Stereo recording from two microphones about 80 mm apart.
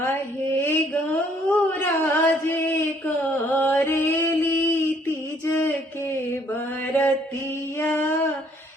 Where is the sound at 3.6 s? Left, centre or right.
Left.